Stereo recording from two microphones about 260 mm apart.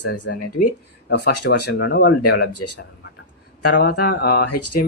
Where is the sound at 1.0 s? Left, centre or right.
Left.